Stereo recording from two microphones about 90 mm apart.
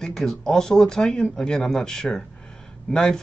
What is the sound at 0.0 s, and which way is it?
A man's voice, 5° left (ahead or behind).